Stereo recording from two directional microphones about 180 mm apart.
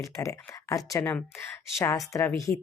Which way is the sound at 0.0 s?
15° left (ahead or behind).